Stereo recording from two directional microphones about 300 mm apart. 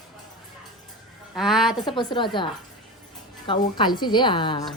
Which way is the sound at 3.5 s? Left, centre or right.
Centre.